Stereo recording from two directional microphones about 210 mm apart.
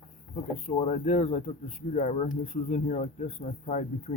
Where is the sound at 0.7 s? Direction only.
35° left (ahead or behind).